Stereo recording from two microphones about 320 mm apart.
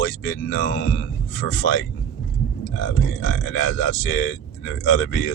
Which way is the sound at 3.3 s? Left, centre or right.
Left.